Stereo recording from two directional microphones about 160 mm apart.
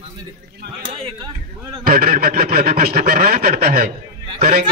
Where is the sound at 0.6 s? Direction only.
90° right.